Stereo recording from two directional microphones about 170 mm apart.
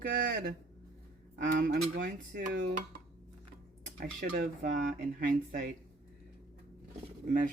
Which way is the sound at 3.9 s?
65° right (ahead or behind).